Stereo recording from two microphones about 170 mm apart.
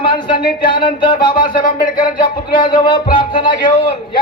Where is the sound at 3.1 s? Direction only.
30° left (ahead or behind).